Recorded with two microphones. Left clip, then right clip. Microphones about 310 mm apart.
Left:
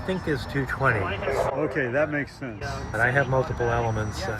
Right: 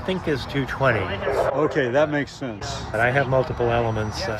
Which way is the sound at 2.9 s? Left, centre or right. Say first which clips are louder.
Right 2 dB; right.